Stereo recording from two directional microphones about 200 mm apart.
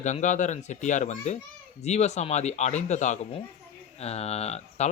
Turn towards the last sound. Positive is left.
turn(degrees=30)  # may be behind; listen again after turning